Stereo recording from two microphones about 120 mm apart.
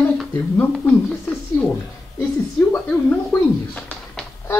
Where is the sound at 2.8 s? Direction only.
15° left (ahead or behind).